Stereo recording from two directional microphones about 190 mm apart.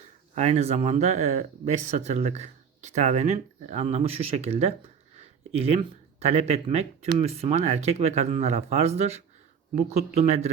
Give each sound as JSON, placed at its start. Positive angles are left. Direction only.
{"t": 0.3, "sound": "speech", "side_deg": -35}